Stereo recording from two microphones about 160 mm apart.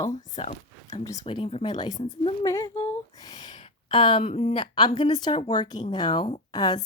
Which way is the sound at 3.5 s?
40° left (ahead or behind).